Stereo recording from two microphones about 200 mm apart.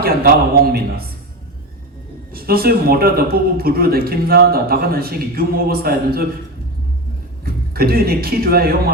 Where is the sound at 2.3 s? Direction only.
50° right (ahead or behind).